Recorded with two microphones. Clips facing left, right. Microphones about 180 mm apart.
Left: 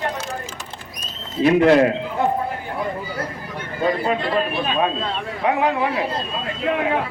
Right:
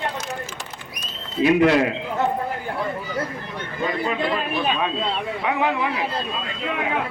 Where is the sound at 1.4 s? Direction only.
45° left (ahead or behind).